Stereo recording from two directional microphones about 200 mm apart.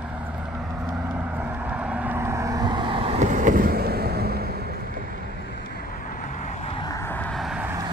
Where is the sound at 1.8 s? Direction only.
5° right (ahead or behind); by 4.5 s 50° right (ahead or behind).